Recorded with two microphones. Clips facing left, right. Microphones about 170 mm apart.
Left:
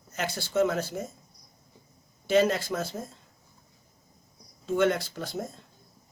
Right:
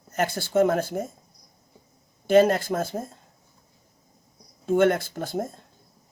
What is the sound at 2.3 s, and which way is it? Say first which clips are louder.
Speech: right 5 dB; 50° right (ahead or behind).